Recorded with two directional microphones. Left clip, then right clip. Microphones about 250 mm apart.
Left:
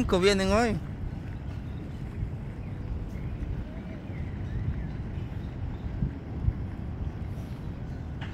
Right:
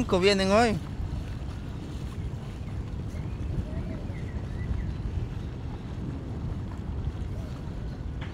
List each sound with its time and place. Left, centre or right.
0.0 s speech: centre